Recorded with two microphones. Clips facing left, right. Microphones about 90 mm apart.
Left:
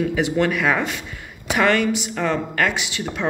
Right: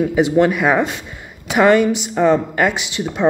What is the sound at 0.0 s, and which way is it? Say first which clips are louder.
Speech: right 6 dB; 20° right (ahead or behind).